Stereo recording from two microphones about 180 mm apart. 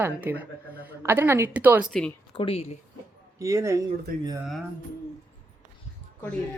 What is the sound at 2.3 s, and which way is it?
Speech, 30° left (ahead or behind).